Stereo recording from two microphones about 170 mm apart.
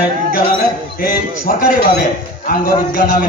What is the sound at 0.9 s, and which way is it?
Speech, 55° left (ahead or behind).